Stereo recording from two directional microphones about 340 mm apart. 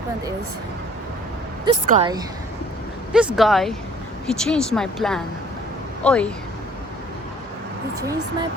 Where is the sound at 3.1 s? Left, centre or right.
Centre.